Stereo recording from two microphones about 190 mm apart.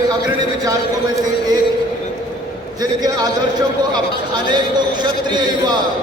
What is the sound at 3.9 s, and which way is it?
A man's voice, 25° right (ahead or behind).